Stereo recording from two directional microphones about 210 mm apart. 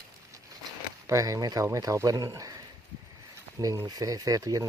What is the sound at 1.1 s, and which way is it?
Speech, 15° right (ahead or behind).